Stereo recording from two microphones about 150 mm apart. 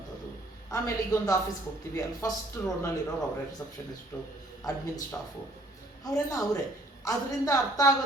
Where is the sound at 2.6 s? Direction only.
15° left (ahead or behind).